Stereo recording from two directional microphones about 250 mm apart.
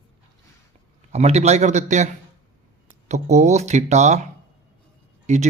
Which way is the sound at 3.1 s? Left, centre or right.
Right.